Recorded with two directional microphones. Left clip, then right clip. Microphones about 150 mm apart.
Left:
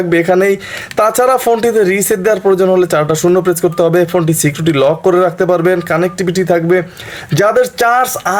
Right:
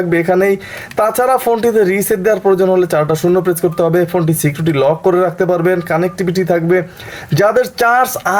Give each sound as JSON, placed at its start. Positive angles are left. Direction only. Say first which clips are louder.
{"t": 0.1, "sound": "speech", "louder": "left 2 dB", "side_deg": 15}